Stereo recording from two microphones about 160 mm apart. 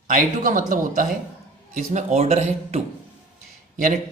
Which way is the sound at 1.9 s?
45° right (ahead or behind).